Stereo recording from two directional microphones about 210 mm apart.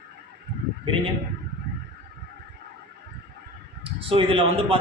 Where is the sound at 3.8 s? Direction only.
25° right (ahead or behind).